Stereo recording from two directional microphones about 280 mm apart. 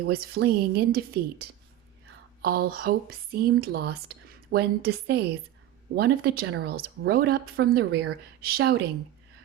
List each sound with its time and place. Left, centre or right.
0.0 s speech: right